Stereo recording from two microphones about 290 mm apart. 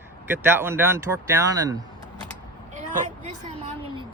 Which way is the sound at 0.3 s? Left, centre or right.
Centre.